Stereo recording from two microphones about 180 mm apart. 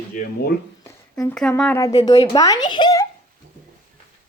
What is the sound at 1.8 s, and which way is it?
Speech, 20° left (ahead or behind).